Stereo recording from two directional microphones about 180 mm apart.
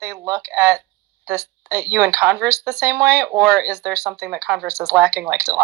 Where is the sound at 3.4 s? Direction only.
60° right (ahead or behind).